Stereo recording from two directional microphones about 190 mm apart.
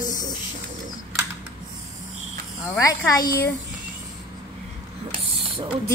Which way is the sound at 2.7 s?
15° left (ahead or behind).